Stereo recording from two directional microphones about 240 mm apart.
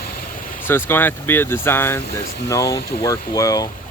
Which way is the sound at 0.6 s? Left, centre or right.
Centre.